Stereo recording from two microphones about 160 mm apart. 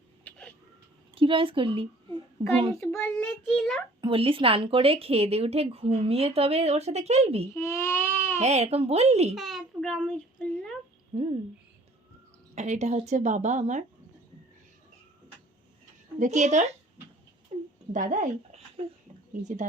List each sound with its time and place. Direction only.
0.3 s a sound: 5° left (ahead or behind)
1.1 s a child's voice: 35° right (ahead or behind)
2.9 s a child's voice: 15° left (ahead or behind)
3.4 s a child's voice: 5° left (ahead or behind)
4.0 s speech: 35° right (ahead or behind)
7.5 s baby cry: 15° left (ahead or behind)
8.4 s speech: 40° right (ahead or behind)
9.3 s a child's voice: centre (ahead or behind)
11.1 s speech: 35° right (ahead or behind)
12.5 s speech: 45° right (ahead or behind)
16.1 s speech: 50° right (ahead or behind)
17.5 s a sound: 40° right (ahead or behind)
17.9 s speech: 55° right (ahead or behind)